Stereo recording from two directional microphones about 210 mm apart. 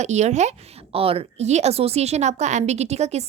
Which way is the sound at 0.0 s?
35° right (ahead or behind).